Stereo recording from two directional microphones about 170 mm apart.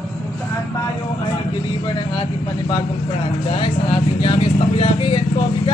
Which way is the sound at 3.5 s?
30° left (ahead or behind).